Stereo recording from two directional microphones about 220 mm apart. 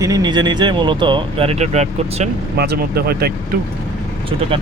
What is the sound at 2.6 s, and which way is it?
Speech, 45° right (ahead or behind).